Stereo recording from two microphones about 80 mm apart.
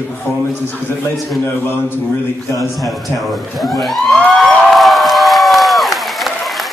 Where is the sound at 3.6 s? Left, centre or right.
Centre.